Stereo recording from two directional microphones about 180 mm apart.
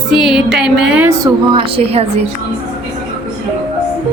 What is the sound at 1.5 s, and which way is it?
Speech, 30° right (ahead or behind).